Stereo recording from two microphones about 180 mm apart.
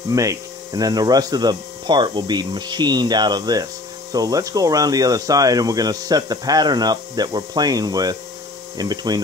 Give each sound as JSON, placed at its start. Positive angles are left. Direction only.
{"t": 0.1, "sound": "speech", "side_deg": -15}